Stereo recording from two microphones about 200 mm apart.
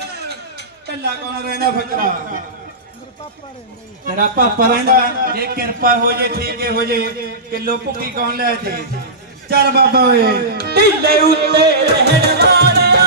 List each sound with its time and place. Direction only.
0.3 s a man's voice: 55° right (ahead or behind)
4.2 s a man's voice: 45° right (ahead or behind)
11.3 s music: 55° right (ahead or behind)